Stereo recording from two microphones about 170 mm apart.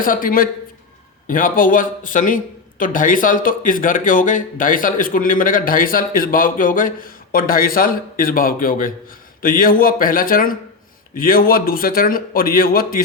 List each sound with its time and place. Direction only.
0.0 s a man's voice: 55° left (ahead or behind)